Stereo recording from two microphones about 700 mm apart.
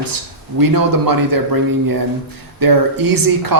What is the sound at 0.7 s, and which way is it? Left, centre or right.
Speech, right.